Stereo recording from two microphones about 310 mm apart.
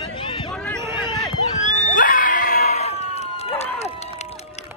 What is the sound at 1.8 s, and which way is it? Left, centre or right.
Crowd, left.